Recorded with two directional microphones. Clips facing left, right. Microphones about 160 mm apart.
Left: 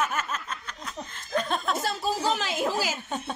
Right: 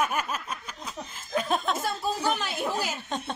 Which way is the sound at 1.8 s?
90° left.